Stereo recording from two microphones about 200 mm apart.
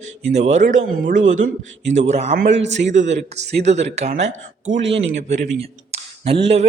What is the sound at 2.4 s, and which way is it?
Speech, 65° right (ahead or behind).